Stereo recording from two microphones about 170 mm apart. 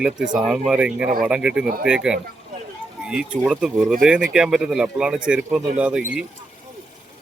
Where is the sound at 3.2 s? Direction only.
5° right (ahead or behind).